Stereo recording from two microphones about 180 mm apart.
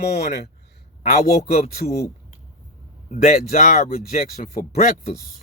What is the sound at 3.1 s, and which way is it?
Speech, 40° left (ahead or behind).